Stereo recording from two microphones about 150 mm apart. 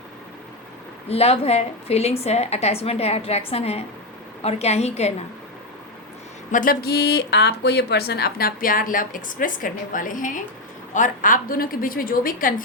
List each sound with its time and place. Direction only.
1.1 s a woman's voice: 40° left (ahead or behind)
6.5 s a sound: 65° left (ahead or behind); by 7.2 s 90° left
7.6 s a woman's voice: 90° left; by 12.6 s 65° left (ahead or behind)